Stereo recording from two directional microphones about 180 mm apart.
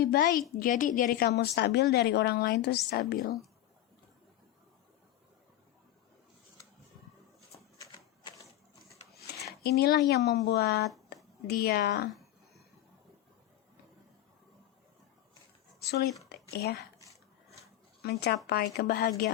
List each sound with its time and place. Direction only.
0.0 s a woman's voice: 60° left (ahead or behind)
7.8 s a sound: 20° left (ahead or behind)
9.5 s a woman's voice: 60° left (ahead or behind)
15.8 s speech: 65° left (ahead or behind)
18.0 s a woman's voice: 60° left (ahead or behind)